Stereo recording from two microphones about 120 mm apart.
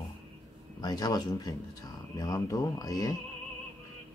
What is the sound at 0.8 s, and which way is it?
Speech, 35° left (ahead or behind).